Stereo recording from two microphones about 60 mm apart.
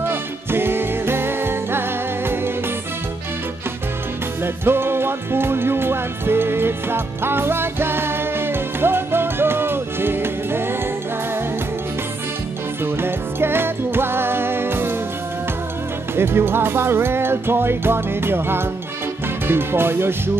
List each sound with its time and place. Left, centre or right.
0.0 s music: right
4.4 s music: right
12.8 s music: right
16.2 s music: right
19.2 s speech: right